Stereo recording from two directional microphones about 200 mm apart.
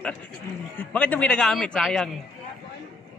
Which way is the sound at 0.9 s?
5° left (ahead or behind).